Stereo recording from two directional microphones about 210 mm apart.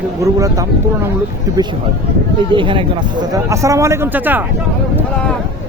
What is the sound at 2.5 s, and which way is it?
Speech, 25° right (ahead or behind).